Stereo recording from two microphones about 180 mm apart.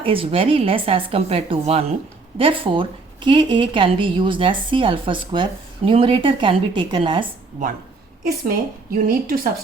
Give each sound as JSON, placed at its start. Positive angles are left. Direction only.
{"t": 0.0, "sound": "a woman's voice", "side_deg": -30}
{"t": 8.9, "sound": "a woman's voice", "side_deg": -55}